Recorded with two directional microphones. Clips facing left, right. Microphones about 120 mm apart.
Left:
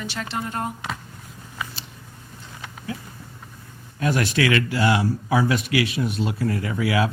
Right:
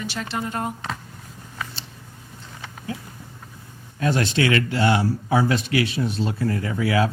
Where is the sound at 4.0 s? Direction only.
30° right (ahead or behind).